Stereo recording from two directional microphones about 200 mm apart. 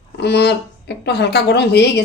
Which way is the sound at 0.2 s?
55° left (ahead or behind).